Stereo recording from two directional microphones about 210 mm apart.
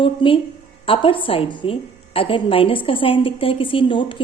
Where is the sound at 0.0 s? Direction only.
25° left (ahead or behind).